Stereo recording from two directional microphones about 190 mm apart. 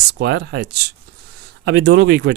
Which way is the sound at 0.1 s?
60° right (ahead or behind).